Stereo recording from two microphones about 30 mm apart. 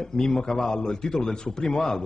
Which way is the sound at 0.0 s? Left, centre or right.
Left.